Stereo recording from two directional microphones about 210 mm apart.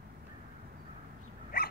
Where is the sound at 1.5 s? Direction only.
45° left (ahead or behind).